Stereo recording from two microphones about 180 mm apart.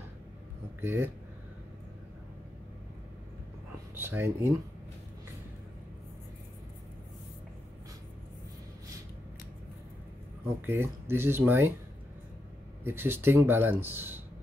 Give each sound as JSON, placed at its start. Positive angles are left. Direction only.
{"t": 0.7, "sound": "speech", "side_deg": -10}
{"t": 3.9, "sound": "speech", "side_deg": -10}
{"t": 10.6, "sound": "speech", "side_deg": -10}
{"t": 12.8, "sound": "speech", "side_deg": -10}